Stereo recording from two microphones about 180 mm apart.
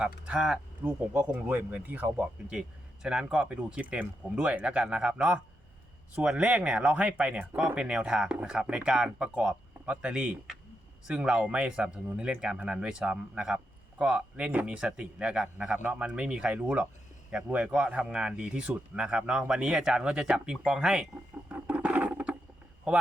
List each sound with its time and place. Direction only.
0.0 s speech: 5° right (ahead or behind)
21.7 s a sound: 5° right (ahead or behind)
22.9 s speech: 5° right (ahead or behind)